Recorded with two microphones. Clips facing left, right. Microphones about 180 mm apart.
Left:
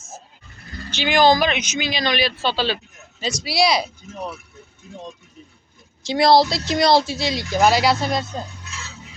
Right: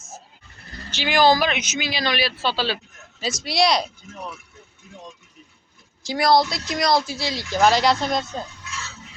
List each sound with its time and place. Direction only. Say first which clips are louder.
0.9 s speech: left 2 dB; centre (ahead or behind)
4.9 s speech: left 5 dB; 35° left (ahead or behind)
6.0 s a woman's voice: left 3 dB; 25° left (ahead or behind); by 8.3 s 5° left (ahead or behind)